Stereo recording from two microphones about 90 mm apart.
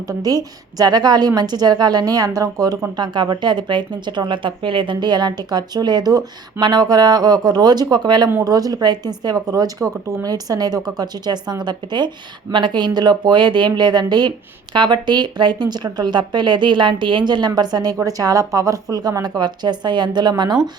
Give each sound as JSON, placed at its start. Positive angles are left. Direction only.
{"t": 0.1, "sound": "speech", "side_deg": -45}
{"t": 2.9, "sound": "speech", "side_deg": -55}
{"t": 8.4, "sound": "speech", "side_deg": -45}